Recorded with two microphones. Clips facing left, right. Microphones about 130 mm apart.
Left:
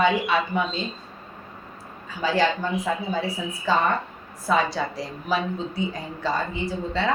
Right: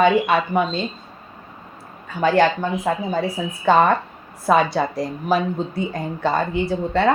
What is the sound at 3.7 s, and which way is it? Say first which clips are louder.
A woman's voice: right 7 dB; 65° right (ahead or behind).